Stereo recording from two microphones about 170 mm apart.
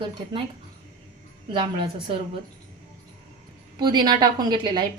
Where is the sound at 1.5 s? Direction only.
30° right (ahead or behind).